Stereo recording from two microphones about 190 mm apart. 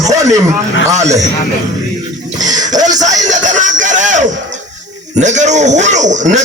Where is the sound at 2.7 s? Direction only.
20° right (ahead or behind).